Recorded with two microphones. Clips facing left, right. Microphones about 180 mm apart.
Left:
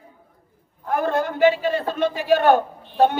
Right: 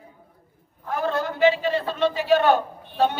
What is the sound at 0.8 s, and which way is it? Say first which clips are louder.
A man's voice: left 3 dB; 50° left (ahead or behind).